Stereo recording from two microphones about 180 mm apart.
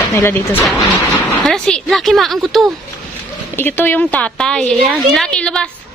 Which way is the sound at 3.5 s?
10° left (ahead or behind).